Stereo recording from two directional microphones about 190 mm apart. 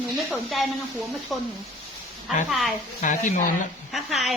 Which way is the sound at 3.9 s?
Centre (ahead or behind).